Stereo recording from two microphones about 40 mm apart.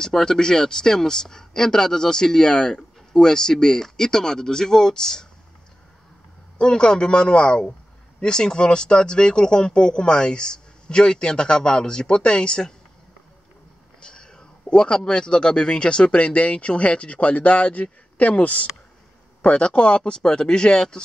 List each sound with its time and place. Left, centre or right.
0.0 s speech: centre
6.6 s speech: left
14.0 s a sound: centre
15.0 s speech: left